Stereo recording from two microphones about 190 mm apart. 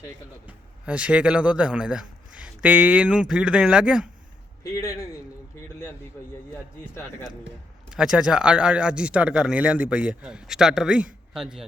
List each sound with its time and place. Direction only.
0.4 s speech: 5° right (ahead or behind)
4.6 s speech: 15° left (ahead or behind)
6.5 s speech: 10° left (ahead or behind)
7.9 s speech: 5° right (ahead or behind)